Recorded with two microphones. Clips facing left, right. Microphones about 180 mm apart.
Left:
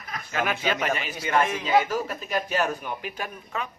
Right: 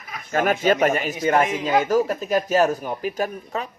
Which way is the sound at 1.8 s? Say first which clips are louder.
Right 9 dB; 45° right (ahead or behind).